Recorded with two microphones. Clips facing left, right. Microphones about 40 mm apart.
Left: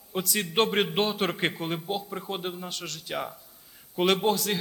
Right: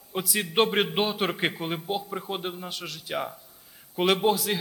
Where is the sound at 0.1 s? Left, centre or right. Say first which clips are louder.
Right 1 dB; centre.